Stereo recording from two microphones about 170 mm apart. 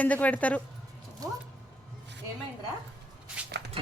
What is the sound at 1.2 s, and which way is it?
Speech, 20° right (ahead or behind).